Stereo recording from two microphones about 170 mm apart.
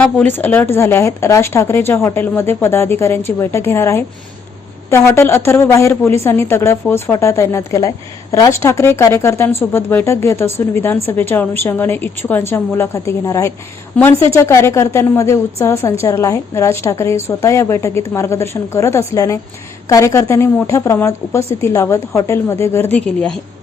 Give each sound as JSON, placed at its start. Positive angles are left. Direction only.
{"t": 0.0, "sound": "speech", "side_deg": 10}